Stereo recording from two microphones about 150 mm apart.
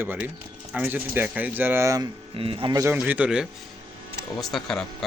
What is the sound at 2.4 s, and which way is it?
Speech, 35° right (ahead or behind).